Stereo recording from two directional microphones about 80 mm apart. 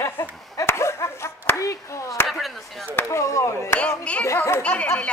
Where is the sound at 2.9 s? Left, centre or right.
Left.